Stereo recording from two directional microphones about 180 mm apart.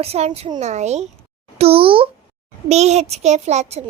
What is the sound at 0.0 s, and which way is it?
A child's voice, 35° right (ahead or behind).